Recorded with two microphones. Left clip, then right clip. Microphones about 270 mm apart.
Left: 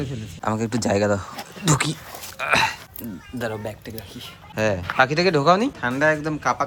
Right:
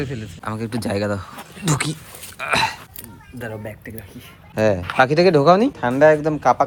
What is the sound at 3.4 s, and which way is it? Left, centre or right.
Speech, centre.